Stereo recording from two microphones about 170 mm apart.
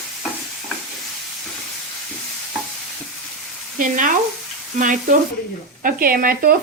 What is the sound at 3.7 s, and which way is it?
Speech, 50° right (ahead or behind).